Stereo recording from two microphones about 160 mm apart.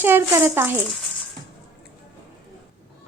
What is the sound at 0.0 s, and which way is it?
Speech, 15° right (ahead or behind).